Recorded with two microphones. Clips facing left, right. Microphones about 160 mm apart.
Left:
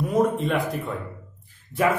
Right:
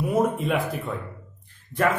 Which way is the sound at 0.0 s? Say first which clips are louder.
Left 1 dB; 5° right (ahead or behind).